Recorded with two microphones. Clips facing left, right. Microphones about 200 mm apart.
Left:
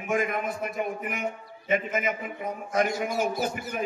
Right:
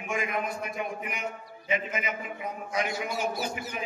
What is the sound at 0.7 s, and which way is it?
A man's voice, 45° left (ahead or behind).